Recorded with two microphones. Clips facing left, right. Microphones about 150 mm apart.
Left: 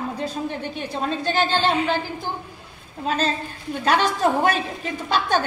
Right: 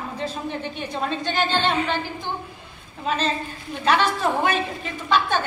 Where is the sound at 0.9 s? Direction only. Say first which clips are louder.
Left 2 dB; 35° left (ahead or behind).